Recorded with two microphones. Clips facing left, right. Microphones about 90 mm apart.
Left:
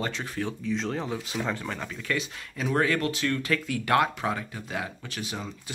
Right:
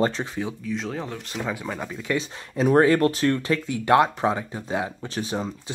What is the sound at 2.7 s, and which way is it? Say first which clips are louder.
Speech: right 8 dB; 35° right (ahead or behind).